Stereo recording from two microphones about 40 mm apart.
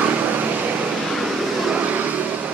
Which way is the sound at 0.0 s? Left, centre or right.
Right.